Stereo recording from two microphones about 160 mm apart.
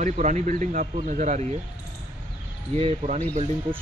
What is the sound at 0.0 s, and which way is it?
Speech, 50° right (ahead or behind).